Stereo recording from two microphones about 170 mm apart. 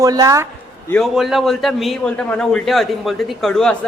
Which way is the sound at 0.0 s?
20° right (ahead or behind).